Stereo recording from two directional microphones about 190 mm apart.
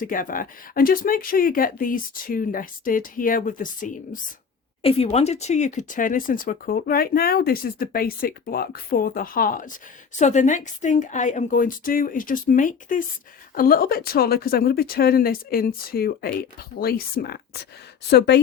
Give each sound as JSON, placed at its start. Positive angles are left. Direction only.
{"t": 0.0, "sound": "speech", "side_deg": 45}
{"t": 4.8, "sound": "a woman's voice", "side_deg": 30}